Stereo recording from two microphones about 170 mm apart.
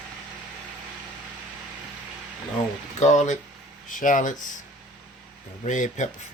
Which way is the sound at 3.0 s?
45° left (ahead or behind).